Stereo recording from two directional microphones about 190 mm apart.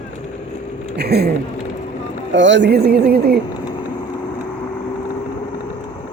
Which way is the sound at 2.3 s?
75° right (ahead or behind).